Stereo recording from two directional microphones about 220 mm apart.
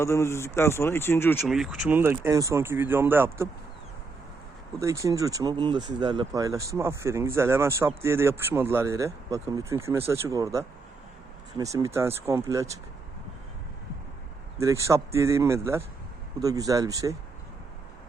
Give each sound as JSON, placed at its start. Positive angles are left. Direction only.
{"t": 0.0, "sound": "speech", "side_deg": 10}
{"t": 1.4, "sound": "speech", "side_deg": 0}
{"t": 4.8, "sound": "speech", "side_deg": -15}
{"t": 14.6, "sound": "speech", "side_deg": -15}